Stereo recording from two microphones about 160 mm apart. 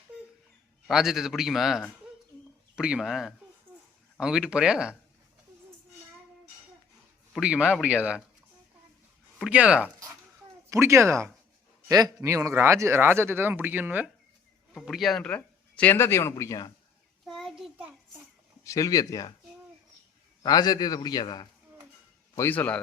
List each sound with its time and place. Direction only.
0.9 s a man's voice: centre (ahead or behind)
7.3 s speech: 5° right (ahead or behind)
9.4 s speech: 5° right (ahead or behind); by 16.7 s 20° left (ahead or behind)
17.2 s child singing: centre (ahead or behind)
18.6 s a man's voice: 20° left (ahead or behind)
20.4 s a man's voice: 25° left (ahead or behind)
22.4 s a man's voice: 10° left (ahead or behind)